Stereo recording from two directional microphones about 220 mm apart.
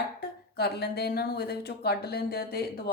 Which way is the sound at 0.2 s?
45° left (ahead or behind).